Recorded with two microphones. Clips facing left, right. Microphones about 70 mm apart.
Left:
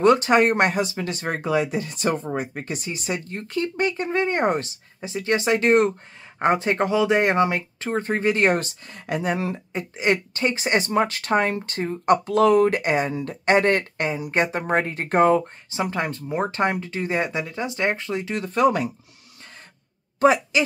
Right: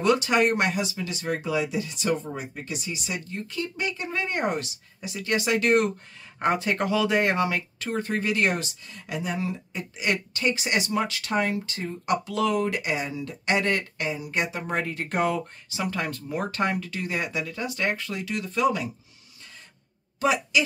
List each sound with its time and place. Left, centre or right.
0.0 s speech: left
9.7 s speech: left
20.2 s speech: left